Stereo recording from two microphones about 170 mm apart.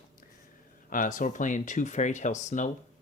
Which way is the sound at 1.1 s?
50° left (ahead or behind).